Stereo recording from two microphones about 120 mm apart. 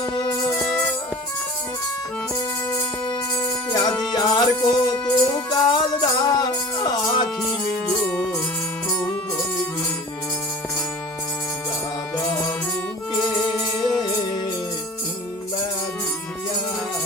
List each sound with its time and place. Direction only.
3.7 s music: 35° left (ahead or behind)
7.4 s music: 10° left (ahead or behind)